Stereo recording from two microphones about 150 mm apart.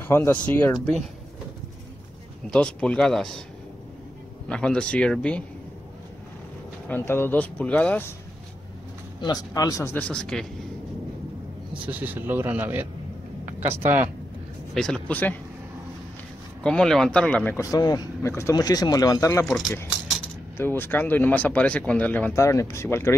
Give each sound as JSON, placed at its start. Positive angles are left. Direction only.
{"t": 0.0, "sound": "speech", "side_deg": 15}
{"t": 2.5, "sound": "speech", "side_deg": 5}
{"t": 4.5, "sound": "speech", "side_deg": 5}
{"t": 6.9, "sound": "speech", "side_deg": 15}
{"t": 9.2, "sound": "speech", "side_deg": 25}
{"t": 9.9, "sound": "speech", "side_deg": 5}
{"t": 11.9, "sound": "speech", "side_deg": -10}
{"t": 14.7, "sound": "speech", "side_deg": 0}
{"t": 16.6, "sound": "speech", "side_deg": 5}
{"t": 17.6, "sound": "speech", "side_deg": 25}
{"t": 20.5, "sound": "speech", "side_deg": 15}